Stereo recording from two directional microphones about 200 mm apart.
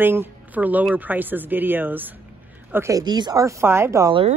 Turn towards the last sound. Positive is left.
turn(degrees=-15)  # may be behind; listen again after turning